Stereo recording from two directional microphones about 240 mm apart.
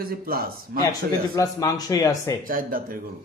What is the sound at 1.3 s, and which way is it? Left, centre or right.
Speech, centre.